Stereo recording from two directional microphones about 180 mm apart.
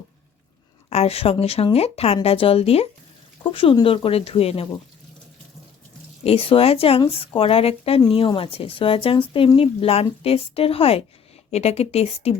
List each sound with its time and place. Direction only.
0.9 s speech: 35° left (ahead or behind)
6.2 s speech: 30° left (ahead or behind)